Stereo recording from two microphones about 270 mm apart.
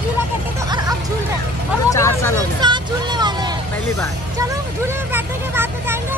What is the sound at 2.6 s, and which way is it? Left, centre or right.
Vehicle, centre.